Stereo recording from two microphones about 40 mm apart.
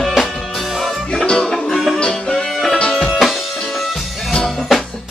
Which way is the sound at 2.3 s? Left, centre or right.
Centre.